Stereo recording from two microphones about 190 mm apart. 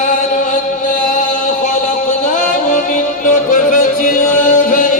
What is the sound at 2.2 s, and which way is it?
Music, 45° left (ahead or behind).